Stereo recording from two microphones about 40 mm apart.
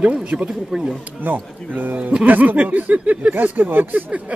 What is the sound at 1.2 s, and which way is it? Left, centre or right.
Speech, right.